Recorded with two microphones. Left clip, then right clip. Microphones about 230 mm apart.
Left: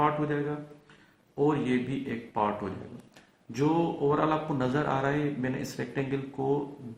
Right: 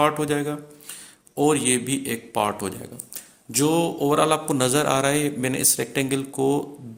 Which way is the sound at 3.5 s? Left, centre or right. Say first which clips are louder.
Right 6 dB; right.